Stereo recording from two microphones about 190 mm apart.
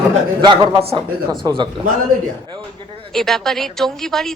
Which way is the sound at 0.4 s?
25° right (ahead or behind).